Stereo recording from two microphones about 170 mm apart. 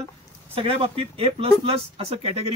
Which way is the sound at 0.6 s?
35° right (ahead or behind).